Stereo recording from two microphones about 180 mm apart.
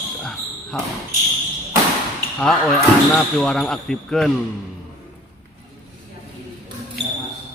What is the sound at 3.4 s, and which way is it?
Speech, centre (ahead or behind).